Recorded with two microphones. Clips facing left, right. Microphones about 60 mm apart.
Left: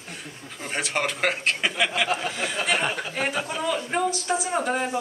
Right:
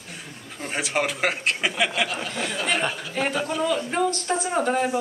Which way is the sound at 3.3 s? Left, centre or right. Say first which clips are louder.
Right 3 dB; centre.